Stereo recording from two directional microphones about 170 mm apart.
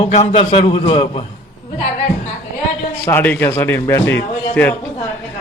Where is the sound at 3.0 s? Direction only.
10° left (ahead or behind).